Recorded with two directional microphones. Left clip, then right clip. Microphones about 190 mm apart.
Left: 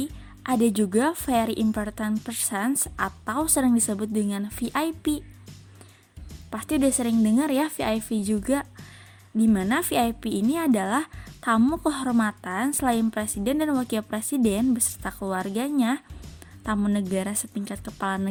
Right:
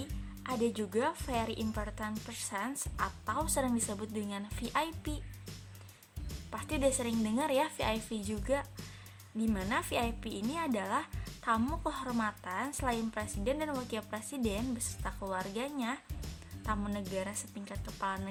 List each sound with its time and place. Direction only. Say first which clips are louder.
0.4 s speech: left 10 dB; 45° left (ahead or behind)
6.5 s speech: left 8 dB; 35° left (ahead or behind)